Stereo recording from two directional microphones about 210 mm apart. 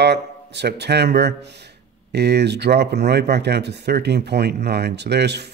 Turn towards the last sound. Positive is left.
turn(degrees=-50)  # may be behind; listen again after turning